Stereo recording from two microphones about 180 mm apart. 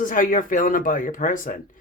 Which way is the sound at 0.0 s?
50° left (ahead or behind).